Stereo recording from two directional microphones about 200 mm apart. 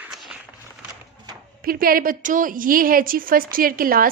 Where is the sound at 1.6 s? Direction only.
45° right (ahead or behind).